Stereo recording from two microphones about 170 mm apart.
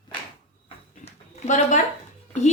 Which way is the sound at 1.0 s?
45° left (ahead or behind).